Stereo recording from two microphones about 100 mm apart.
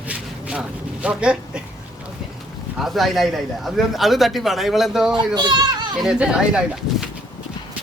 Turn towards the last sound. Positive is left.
turn(degrees=-5)  # may be behind; listen again after turning